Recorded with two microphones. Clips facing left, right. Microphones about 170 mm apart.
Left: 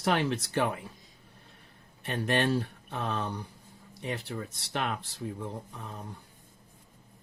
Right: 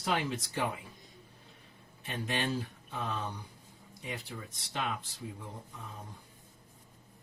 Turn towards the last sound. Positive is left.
turn(degrees=65)  # may be behind; listen again after turning